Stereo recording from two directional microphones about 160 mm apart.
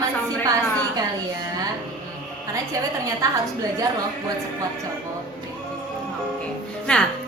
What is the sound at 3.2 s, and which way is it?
Speech, 20° right (ahead or behind).